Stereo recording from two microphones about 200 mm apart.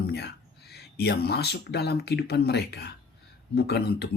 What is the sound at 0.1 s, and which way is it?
Speech, 55° left (ahead or behind).